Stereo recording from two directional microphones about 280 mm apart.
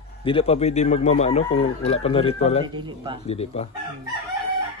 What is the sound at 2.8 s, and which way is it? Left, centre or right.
Speech, centre.